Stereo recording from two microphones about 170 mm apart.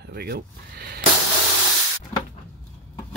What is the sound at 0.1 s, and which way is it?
Speech, 70° right (ahead or behind).